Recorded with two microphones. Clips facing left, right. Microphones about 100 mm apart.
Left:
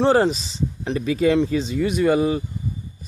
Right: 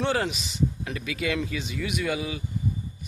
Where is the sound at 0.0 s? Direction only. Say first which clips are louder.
Left 9 dB; 35° left (ahead or behind).